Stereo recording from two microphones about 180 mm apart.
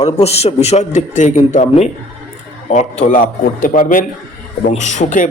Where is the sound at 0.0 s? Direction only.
35° left (ahead or behind).